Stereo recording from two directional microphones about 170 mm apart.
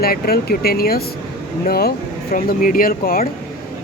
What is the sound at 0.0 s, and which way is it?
Speech, 65° left (ahead or behind).